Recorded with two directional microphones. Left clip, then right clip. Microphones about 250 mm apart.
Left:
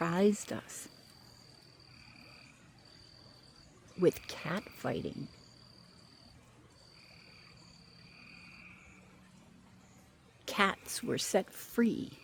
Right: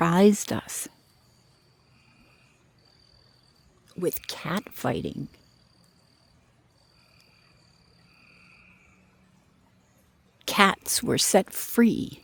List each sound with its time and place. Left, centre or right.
0.0 s speech: right
4.1 s a woman's voice: right
10.4 s a woman's voice: right